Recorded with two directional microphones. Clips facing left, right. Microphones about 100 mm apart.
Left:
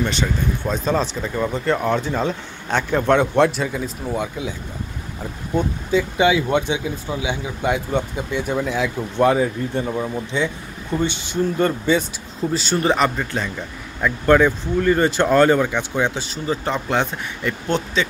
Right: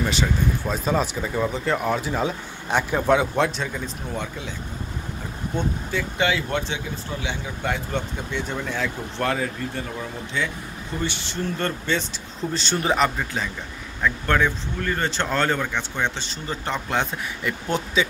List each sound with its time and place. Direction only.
0.0 s speech: 5° right (ahead or behind); by 4.6 s 15° left (ahead or behind)
5.6 s speech: 15° left (ahead or behind); by 13.5 s centre (ahead or behind)
14.0 s speech: 10° left (ahead or behind); by 18.0 s 5° right (ahead or behind)